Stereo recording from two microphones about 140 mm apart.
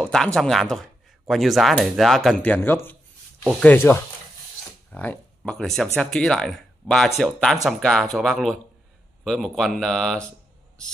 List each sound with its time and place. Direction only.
0.0 s speech: 5° left (ahead or behind)